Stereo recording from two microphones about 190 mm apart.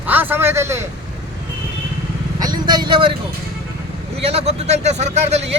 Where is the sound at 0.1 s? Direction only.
10° right (ahead or behind).